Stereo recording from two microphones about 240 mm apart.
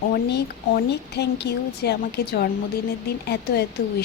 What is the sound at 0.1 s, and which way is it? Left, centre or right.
A woman's voice, left.